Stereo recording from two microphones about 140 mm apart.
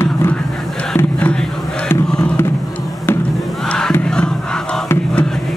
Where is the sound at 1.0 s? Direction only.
10° left (ahead or behind).